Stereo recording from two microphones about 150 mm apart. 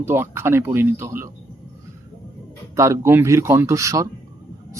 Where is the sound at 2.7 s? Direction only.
20° right (ahead or behind).